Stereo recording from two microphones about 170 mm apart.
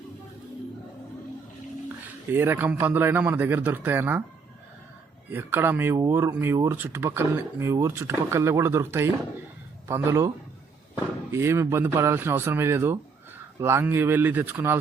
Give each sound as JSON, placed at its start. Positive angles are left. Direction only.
{"t": 2.3, "sound": "speech", "side_deg": -10}
{"t": 5.3, "sound": "speech", "side_deg": -10}